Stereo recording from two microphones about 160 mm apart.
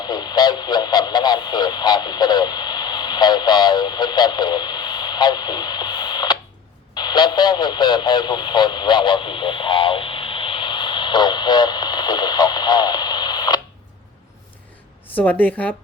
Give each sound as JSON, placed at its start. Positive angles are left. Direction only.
{"t": 0.0, "sound": "radio", "side_deg": 25}
{"t": 6.9, "sound": "speech", "side_deg": 25}
{"t": 15.1, "sound": "speech", "side_deg": 10}